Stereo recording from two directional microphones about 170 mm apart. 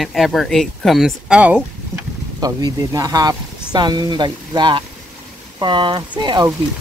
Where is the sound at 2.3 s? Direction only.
20° right (ahead or behind).